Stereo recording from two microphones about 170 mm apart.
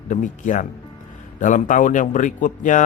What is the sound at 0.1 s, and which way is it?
A man's voice, 50° left (ahead or behind).